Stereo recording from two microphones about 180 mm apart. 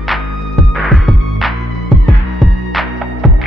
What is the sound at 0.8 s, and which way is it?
Music, centre (ahead or behind).